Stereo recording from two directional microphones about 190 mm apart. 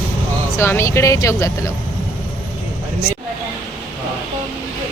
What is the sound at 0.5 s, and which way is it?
Speech, 15° left (ahead or behind).